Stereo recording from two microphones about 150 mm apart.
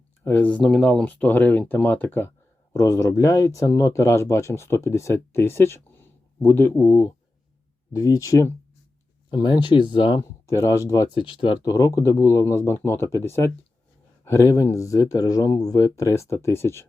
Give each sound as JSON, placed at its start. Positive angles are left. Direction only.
{"t": 0.3, "sound": "speech", "side_deg": 10}
{"t": 9.3, "sound": "speech", "side_deg": 30}
{"t": 11.3, "sound": "speech", "side_deg": 35}
{"t": 11.6, "sound": "speech", "side_deg": 25}